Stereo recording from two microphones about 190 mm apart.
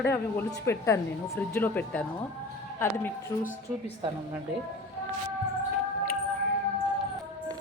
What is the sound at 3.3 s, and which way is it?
Speech, 15° left (ahead or behind).